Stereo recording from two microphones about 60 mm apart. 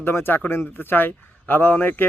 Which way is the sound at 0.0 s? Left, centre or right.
Left.